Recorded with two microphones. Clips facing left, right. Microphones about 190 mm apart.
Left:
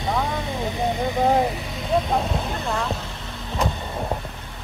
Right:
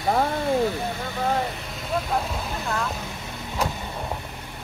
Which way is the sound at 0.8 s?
15° left (ahead or behind).